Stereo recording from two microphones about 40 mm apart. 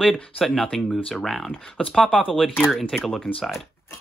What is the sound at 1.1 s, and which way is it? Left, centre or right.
Speech, centre.